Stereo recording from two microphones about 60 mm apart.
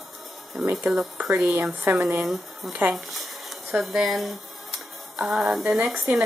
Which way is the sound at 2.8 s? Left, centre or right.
Right.